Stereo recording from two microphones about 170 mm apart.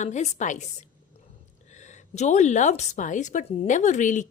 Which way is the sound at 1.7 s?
45° left (ahead or behind).